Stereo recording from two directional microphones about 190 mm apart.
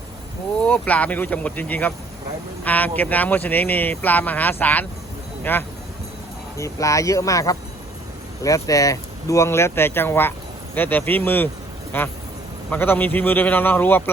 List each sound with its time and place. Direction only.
0.6 s speech: 5° left (ahead or behind)